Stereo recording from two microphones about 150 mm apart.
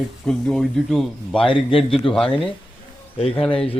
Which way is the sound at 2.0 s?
35° left (ahead or behind).